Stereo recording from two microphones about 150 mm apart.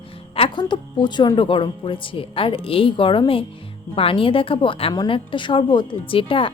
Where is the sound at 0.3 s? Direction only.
35° left (ahead or behind).